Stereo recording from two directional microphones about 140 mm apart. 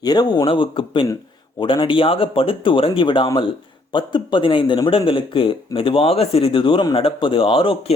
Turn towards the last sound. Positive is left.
turn(degrees=40)  # may be behind; listen again after turning